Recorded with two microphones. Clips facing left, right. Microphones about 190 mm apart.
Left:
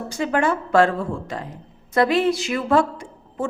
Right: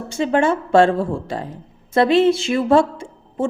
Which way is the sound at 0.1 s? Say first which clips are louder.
Right 4 dB; 25° right (ahead or behind).